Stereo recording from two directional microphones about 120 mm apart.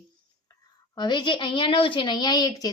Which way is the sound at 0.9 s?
40° left (ahead or behind).